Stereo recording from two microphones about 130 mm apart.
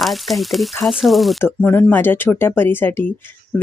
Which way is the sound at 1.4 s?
15° left (ahead or behind).